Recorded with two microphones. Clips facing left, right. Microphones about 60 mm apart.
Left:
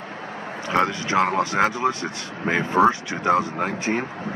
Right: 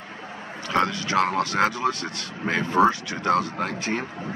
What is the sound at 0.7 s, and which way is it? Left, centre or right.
Speech, left.